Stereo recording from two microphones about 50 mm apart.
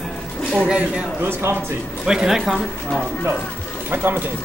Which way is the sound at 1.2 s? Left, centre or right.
Right.